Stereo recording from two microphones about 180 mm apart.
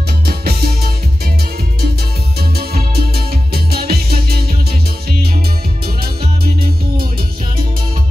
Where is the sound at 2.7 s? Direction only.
60° right (ahead or behind).